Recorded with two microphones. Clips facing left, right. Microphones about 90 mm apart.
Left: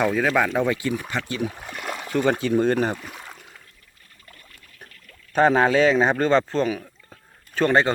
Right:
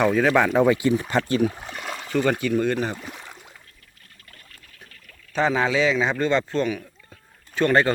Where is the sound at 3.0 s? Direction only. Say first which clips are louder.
Even; centre (ahead or behind).